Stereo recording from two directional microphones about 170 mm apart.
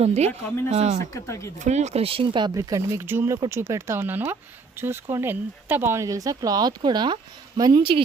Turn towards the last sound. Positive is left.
turn(degrees=-30)  # may be behind; listen again after turning